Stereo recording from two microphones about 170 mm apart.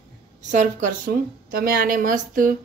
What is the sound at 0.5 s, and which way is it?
A woman's voice, 50° right (ahead or behind).